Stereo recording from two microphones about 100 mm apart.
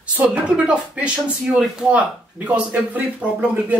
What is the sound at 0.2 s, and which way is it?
Speech, 10° right (ahead or behind).